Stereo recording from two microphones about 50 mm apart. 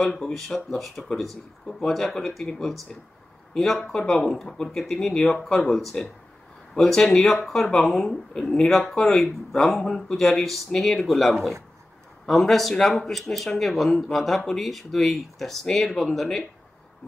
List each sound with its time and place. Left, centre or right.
0.0 s speech: centre